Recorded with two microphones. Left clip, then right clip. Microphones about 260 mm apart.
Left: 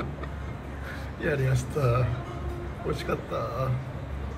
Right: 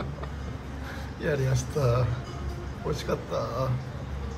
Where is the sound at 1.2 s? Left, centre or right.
Centre.